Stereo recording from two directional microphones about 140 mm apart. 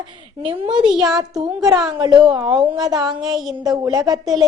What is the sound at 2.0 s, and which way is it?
A woman's voice, 30° right (ahead or behind).